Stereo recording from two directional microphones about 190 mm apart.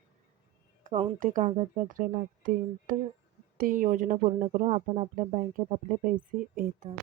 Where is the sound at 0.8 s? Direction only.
40° right (ahead or behind).